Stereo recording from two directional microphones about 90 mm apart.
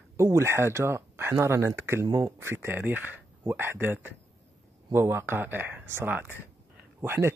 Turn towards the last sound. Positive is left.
turn(degrees=-25)  # may be behind; listen again after turning